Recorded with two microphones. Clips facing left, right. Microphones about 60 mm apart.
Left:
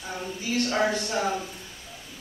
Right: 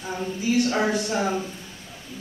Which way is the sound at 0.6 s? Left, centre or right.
Centre.